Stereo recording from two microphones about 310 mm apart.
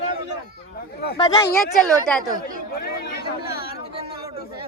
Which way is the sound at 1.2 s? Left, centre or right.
Centre.